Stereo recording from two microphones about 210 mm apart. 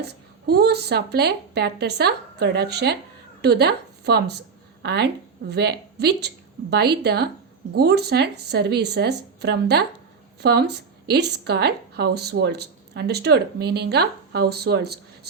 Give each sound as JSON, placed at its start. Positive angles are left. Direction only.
{"t": 0.0, "sound": "a woman's voice", "side_deg": -50}